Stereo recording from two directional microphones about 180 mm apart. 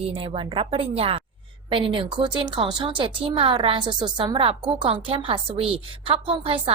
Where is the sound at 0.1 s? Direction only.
30° right (ahead or behind).